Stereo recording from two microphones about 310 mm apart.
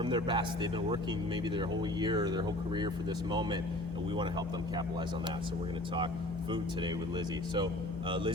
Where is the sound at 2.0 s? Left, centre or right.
Centre.